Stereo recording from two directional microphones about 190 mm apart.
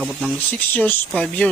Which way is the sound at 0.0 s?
5° right (ahead or behind).